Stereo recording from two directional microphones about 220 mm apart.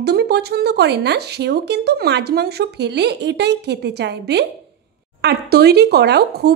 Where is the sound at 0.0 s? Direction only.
50° right (ahead or behind).